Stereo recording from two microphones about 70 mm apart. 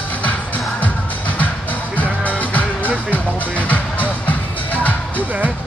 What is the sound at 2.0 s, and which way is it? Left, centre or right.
Music, left.